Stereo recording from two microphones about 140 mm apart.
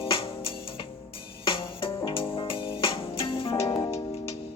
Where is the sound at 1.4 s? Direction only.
40° left (ahead or behind).